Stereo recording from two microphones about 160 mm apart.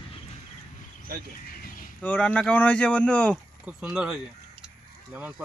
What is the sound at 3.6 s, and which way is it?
Speech, 5° right (ahead or behind).